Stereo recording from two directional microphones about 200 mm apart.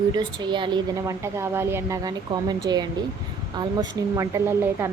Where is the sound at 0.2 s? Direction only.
20° right (ahead or behind).